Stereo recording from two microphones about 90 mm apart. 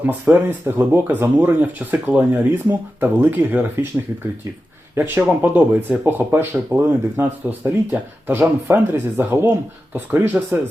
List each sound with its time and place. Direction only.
0.0 s speech: 20° right (ahead or behind)
4.9 s speech: 25° right (ahead or behind)